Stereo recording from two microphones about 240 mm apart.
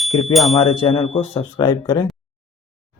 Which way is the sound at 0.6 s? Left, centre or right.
Left.